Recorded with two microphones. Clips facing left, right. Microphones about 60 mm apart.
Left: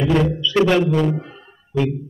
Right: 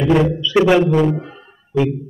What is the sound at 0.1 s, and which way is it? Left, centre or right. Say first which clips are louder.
Speech: right 6 dB; centre.